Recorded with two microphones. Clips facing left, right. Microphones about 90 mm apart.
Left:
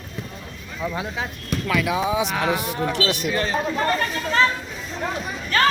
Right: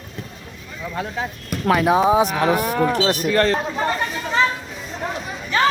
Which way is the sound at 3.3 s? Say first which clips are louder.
Right 7 dB; 65° right (ahead or behind).